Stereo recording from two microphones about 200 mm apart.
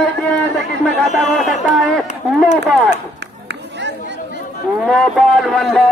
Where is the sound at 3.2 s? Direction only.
60° right (ahead or behind).